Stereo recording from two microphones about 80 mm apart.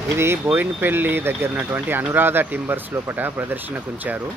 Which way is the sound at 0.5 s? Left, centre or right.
Right.